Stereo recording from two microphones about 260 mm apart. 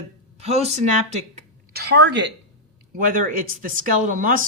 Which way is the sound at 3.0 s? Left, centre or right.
Right.